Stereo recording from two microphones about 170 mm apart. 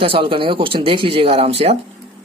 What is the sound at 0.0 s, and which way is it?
Speech, 30° right (ahead or behind).